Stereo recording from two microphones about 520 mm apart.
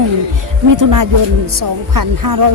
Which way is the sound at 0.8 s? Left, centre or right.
Right.